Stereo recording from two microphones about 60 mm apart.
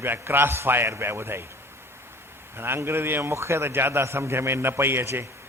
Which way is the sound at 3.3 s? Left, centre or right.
Right.